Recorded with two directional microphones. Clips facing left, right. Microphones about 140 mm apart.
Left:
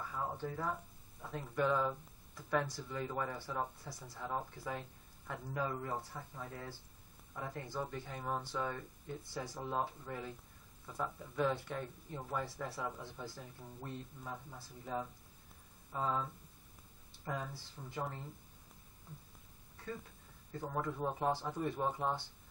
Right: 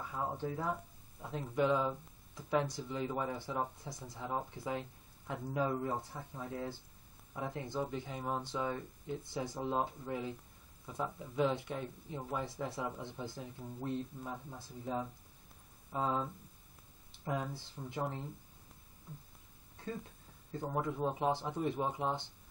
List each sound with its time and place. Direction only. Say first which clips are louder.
0.1 s speech: right 4 dB; 20° right (ahead or behind)
17.2 s speech: right 4 dB; 15° right (ahead or behind)
20.5 s speech: right 3 dB; 20° right (ahead or behind)